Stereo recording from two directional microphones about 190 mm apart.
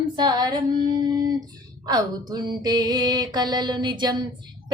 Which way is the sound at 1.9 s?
20° right (ahead or behind).